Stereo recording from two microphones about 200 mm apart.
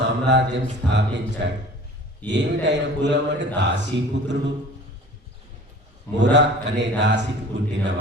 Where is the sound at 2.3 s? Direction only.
60° right (ahead or behind).